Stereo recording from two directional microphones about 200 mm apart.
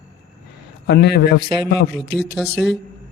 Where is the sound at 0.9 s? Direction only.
55° left (ahead or behind).